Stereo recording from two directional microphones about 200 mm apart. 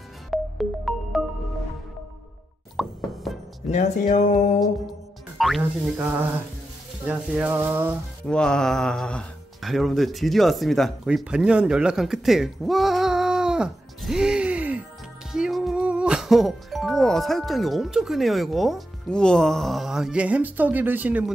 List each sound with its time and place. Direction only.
0.3 s music: centre (ahead or behind)
2.8 s plop: centre (ahead or behind)
3.3 s music: centre (ahead or behind)
3.7 s speech: 35° left (ahead or behind)
5.4 s speech: centre (ahead or behind)
7.1 s a sound: 10° right (ahead or behind)
8.3 s speech: 5° left (ahead or behind)